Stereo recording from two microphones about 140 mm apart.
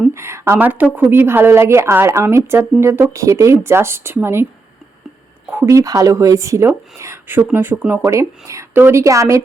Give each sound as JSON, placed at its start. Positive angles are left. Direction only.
{"t": 0.1, "sound": "a woman's voice", "side_deg": -20}
{"t": 5.5, "sound": "a woman's voice", "side_deg": -20}